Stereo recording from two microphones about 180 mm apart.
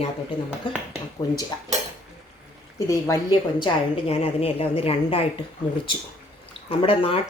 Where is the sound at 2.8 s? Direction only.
15° left (ahead or behind).